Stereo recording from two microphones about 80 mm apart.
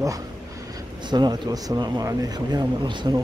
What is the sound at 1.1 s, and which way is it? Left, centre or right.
Speech, right.